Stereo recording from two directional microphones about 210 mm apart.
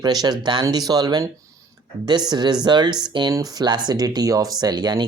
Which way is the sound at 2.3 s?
20° right (ahead or behind).